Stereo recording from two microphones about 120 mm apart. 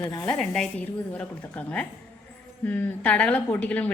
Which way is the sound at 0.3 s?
5° left (ahead or behind).